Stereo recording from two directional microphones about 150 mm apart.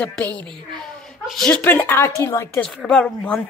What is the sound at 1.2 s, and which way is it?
A woman's voice, 5° left (ahead or behind).